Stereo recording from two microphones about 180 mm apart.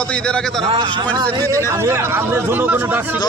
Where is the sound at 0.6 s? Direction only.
30° right (ahead or behind).